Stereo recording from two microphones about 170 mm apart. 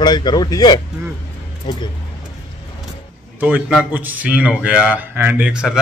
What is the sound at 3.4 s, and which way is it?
A man's voice, 10° right (ahead or behind).